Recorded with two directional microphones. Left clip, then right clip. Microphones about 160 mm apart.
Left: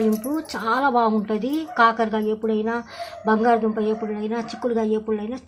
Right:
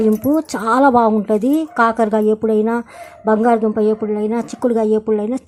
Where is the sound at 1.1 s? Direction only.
35° right (ahead or behind).